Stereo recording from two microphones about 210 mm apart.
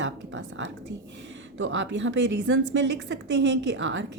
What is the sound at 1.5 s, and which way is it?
A woman's voice, 65° right (ahead or behind).